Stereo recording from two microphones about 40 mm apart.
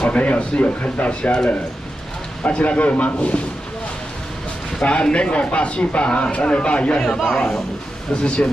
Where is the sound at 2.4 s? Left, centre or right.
Left.